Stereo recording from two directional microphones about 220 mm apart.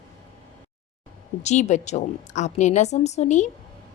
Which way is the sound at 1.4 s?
30° left (ahead or behind).